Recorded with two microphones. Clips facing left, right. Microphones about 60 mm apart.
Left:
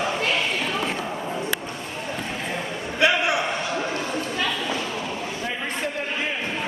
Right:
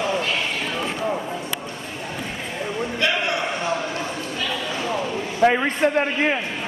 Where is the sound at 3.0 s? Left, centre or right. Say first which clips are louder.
Left 4 dB; centre.